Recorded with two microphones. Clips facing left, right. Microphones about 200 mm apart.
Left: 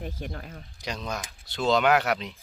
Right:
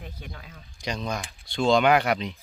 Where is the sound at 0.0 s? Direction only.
45° left (ahead or behind).